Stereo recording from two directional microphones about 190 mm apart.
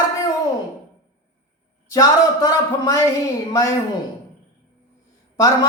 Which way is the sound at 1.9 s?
20° left (ahead or behind).